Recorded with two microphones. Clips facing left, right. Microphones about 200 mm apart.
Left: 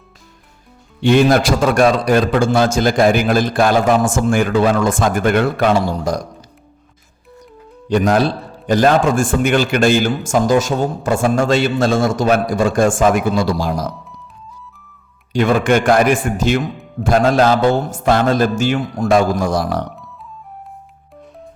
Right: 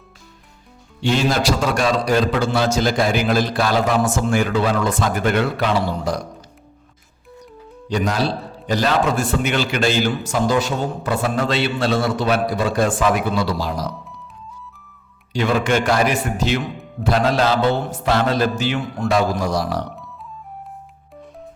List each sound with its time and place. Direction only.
1.0 s a man's voice: 55° left (ahead or behind)
7.9 s a man's voice: 55° left (ahead or behind)
15.3 s a man's voice: 50° left (ahead or behind)